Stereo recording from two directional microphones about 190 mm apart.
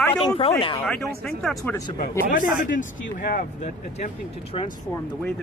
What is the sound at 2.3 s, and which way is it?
Speech, 45° left (ahead or behind).